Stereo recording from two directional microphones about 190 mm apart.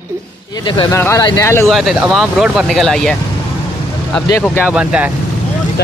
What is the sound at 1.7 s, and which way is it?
Speech, centre (ahead or behind).